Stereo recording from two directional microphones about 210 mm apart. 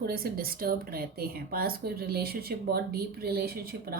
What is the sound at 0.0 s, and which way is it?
Speech, 45° right (ahead or behind).